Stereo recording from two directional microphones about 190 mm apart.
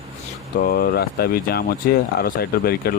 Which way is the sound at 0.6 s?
50° left (ahead or behind).